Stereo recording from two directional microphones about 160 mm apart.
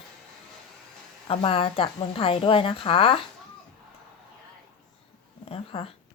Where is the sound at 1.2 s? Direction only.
30° left (ahead or behind).